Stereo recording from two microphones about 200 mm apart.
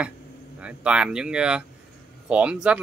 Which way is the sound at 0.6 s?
5° right (ahead or behind).